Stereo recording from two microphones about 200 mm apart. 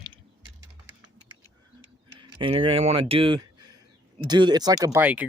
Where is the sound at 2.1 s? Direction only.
25° right (ahead or behind).